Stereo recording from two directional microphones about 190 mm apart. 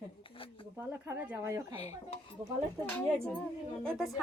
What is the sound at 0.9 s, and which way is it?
Speech, 10° right (ahead or behind).